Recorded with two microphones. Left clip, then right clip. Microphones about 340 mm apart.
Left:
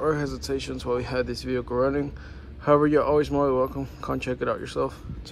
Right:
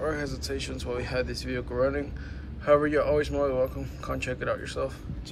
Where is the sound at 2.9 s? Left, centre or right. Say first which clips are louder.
Left 3 dB; centre.